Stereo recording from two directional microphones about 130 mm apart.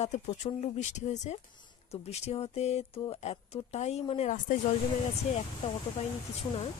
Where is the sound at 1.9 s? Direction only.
55° left (ahead or behind); by 4.5 s 75° left (ahead or behind).